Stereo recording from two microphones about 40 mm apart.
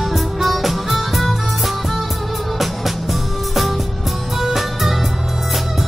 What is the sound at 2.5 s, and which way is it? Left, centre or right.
Music, centre.